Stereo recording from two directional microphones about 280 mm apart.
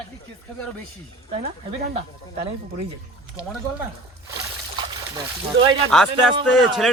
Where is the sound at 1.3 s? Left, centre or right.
Right.